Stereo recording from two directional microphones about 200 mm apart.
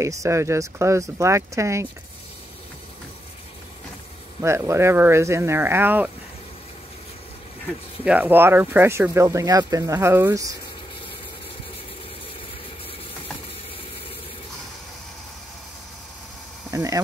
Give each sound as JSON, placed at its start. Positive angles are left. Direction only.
{"t": 0.0, "sound": "speech", "side_deg": -15}
{"t": 4.4, "sound": "speech", "side_deg": -15}
{"t": 8.0, "sound": "speech", "side_deg": -5}
{"t": 16.7, "sound": "speech", "side_deg": -15}